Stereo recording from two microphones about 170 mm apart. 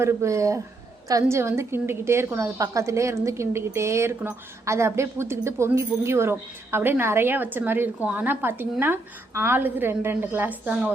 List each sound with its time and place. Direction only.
0.0 s a woman's voice: 15° right (ahead or behind)